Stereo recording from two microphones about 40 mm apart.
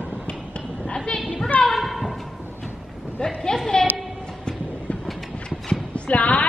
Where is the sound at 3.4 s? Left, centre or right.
Centre.